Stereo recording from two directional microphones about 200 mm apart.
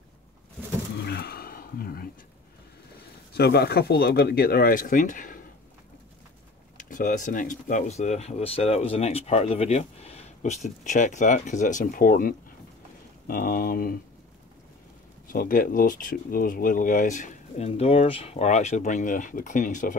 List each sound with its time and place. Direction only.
1.0 s a sound: 55° left (ahead or behind)
3.3 s speech: 55° left (ahead or behind)
6.8 s speech: 40° left (ahead or behind)
15.2 s speech: 45° left (ahead or behind)